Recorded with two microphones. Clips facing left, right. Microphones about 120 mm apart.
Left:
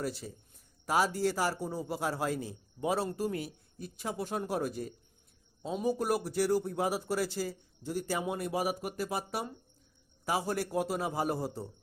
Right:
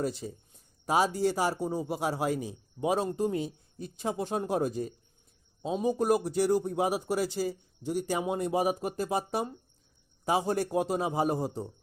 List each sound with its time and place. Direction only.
0.0 s a man's voice: 20° right (ahead or behind)